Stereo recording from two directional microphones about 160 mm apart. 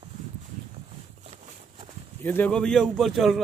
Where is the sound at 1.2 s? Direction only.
40° right (ahead or behind).